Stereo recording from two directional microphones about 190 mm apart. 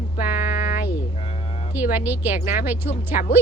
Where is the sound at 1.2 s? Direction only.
35° left (ahead or behind).